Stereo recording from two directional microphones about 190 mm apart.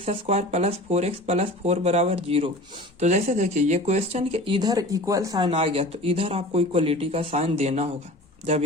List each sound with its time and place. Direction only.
0.0 s speech: 30° right (ahead or behind)
5.5 s speech: 30° right (ahead or behind)